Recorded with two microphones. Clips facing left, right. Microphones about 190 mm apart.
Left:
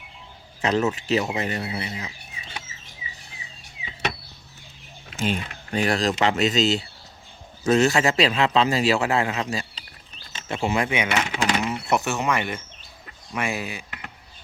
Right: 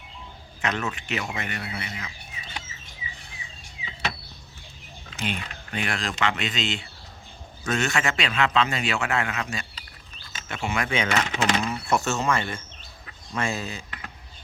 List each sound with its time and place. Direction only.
0.6 s a man's voice: 35° left (ahead or behind)
5.2 s a man's voice: 40° left (ahead or behind)
10.8 s speech: 15° left (ahead or behind)